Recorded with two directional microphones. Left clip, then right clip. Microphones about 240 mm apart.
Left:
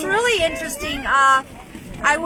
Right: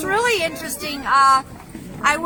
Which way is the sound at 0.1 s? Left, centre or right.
Centre.